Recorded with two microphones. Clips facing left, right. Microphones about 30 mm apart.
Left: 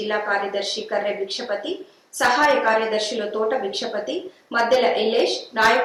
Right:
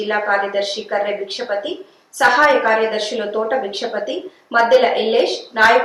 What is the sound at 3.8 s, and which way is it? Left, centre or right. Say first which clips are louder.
A woman's voice: right 3 dB; centre.